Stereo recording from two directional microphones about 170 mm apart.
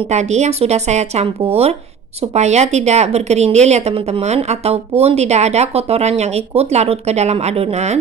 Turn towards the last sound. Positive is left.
turn(degrees=-40)  # may be behind; listen again after turning